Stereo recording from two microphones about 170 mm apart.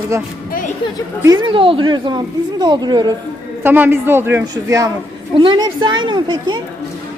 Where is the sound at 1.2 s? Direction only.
25° right (ahead or behind).